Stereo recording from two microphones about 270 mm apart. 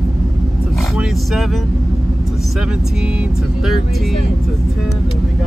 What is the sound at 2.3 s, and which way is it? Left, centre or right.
Speech, centre.